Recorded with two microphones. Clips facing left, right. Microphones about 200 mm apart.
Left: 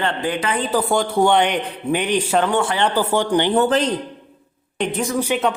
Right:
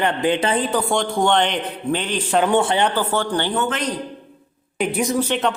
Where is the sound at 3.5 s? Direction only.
35° left (ahead or behind).